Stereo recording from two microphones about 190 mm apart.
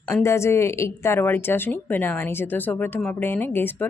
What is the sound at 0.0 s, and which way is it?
A woman's voice, 15° left (ahead or behind).